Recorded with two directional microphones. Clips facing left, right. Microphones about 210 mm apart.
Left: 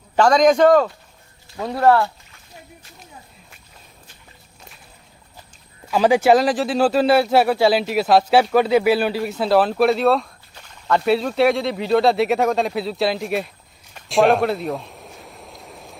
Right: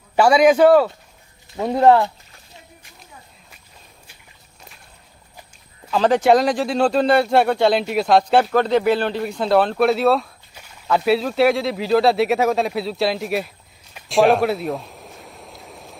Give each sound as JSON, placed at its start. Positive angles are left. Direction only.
{"t": 0.2, "sound": "a man's voice", "side_deg": -10}
{"t": 1.5, "sound": "speech", "side_deg": -20}
{"t": 5.9, "sound": "speech", "side_deg": 10}
{"t": 13.9, "sound": "a sound", "side_deg": 0}